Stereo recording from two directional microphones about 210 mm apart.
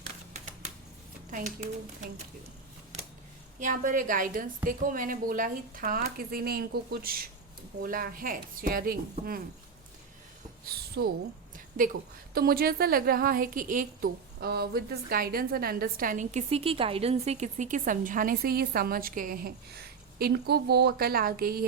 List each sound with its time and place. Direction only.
1.3 s a woman's voice: 40° right (ahead or behind)
3.6 s a woman's voice: 40° right (ahead or behind)
10.7 s a woman's voice: 45° right (ahead or behind)